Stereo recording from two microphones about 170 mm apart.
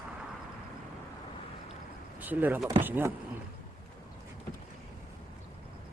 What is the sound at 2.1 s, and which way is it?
Speech, 10° right (ahead or behind).